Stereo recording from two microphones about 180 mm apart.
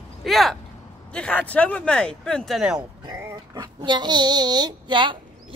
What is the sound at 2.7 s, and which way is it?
Speech, 20° right (ahead or behind).